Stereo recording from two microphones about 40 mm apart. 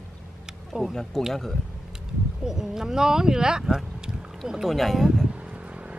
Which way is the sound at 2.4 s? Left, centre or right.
Centre.